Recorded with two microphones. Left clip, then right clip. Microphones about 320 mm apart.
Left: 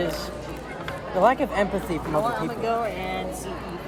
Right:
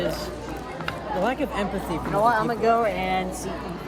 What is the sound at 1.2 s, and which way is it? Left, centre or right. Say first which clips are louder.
Speech: left 7 dB; centre.